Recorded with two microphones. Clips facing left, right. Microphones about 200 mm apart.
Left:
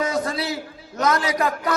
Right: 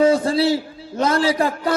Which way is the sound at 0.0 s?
30° right (ahead or behind).